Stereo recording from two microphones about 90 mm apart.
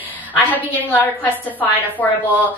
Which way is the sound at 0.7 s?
20° left (ahead or behind).